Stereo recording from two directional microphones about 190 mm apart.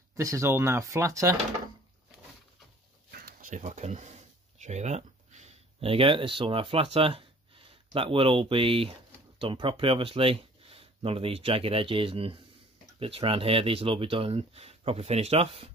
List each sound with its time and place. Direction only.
0.1 s speech: 15° right (ahead or behind)
3.1 s a sound: 50° right (ahead or behind); by 8.9 s 30° right (ahead or behind)
9.4 s speech: 30° right (ahead or behind)